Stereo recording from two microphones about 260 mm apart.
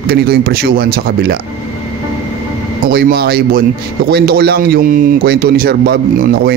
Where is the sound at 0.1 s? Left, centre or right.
Right.